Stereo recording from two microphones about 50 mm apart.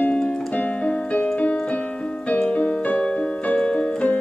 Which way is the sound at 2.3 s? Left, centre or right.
Left.